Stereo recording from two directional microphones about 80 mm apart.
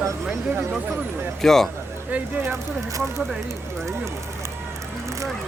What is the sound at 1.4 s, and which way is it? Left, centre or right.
Speech, centre.